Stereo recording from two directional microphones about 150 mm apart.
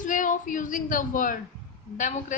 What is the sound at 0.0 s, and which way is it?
A woman's voice, 60° left (ahead or behind).